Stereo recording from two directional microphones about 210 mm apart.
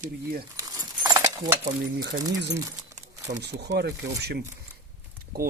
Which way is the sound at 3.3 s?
50° right (ahead or behind).